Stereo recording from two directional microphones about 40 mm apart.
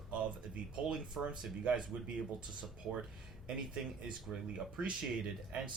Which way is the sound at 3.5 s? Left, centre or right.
Right.